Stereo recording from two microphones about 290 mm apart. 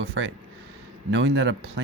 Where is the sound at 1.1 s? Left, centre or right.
Right.